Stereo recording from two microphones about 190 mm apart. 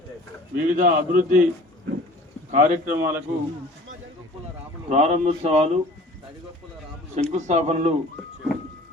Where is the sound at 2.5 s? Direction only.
40° right (ahead or behind).